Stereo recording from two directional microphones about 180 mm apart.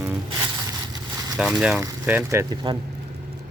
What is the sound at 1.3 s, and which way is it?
Speech, 5° right (ahead or behind).